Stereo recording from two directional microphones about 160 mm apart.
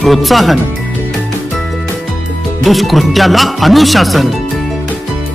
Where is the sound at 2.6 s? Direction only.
Centre (ahead or behind).